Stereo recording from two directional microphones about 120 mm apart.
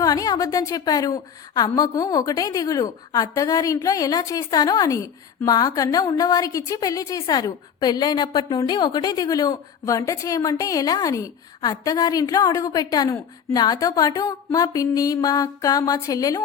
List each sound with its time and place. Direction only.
0.0 s a woman's voice: 30° left (ahead or behind)